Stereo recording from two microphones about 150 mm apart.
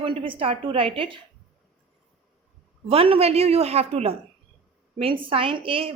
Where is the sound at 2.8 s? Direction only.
40° right (ahead or behind).